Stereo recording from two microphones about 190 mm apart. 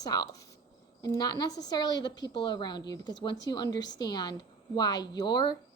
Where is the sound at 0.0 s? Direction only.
20° left (ahead or behind).